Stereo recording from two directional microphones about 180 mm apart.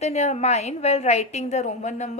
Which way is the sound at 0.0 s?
40° left (ahead or behind).